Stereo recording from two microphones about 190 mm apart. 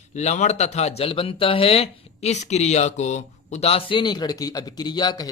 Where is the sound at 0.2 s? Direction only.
35° left (ahead or behind).